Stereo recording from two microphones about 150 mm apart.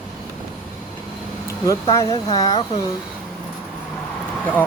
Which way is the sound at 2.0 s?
20° left (ahead or behind).